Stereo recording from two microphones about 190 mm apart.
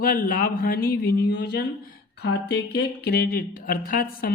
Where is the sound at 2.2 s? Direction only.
60° left (ahead or behind).